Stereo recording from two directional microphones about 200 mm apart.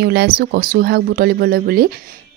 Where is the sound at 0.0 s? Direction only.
55° right (ahead or behind).